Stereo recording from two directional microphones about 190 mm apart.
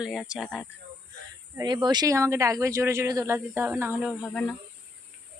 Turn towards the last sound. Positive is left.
turn(degrees=0)  # may be behind; listen again after turning